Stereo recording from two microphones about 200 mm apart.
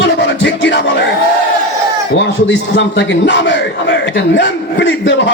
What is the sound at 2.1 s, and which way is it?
A man's voice, 60° left (ahead or behind).